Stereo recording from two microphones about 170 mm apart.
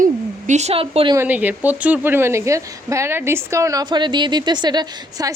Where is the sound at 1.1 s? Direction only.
10° right (ahead or behind).